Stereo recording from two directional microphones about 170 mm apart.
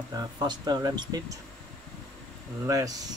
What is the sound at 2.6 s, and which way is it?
Speech, 20° right (ahead or behind).